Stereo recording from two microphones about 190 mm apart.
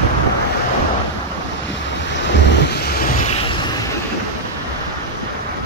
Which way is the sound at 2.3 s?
65° left (ahead or behind).